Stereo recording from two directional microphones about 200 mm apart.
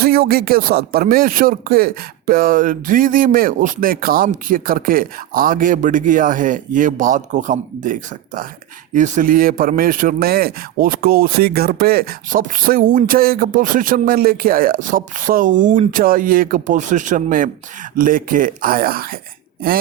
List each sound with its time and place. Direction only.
0.0 s a man's voice: 50° right (ahead or behind)